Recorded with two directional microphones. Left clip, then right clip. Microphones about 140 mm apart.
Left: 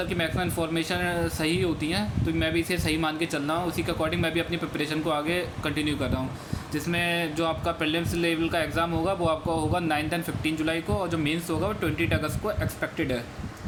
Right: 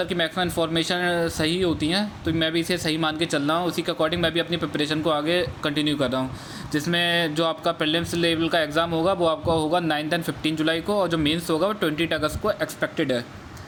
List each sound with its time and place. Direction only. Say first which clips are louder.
0.0 s speech: right 4 dB; 60° right (ahead or behind)